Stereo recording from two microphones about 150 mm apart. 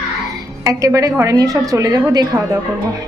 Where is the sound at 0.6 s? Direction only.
20° right (ahead or behind).